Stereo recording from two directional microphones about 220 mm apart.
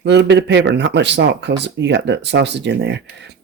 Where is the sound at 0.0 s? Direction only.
50° right (ahead or behind).